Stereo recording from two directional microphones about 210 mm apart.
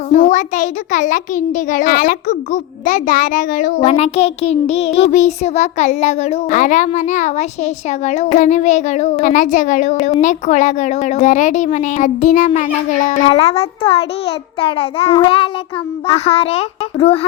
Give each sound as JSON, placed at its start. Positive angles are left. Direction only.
{"t": 0.1, "sound": "a child's voice", "side_deg": 35}